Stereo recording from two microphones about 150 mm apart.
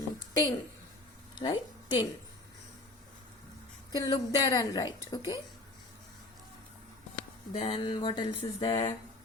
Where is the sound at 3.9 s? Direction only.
25° left (ahead or behind).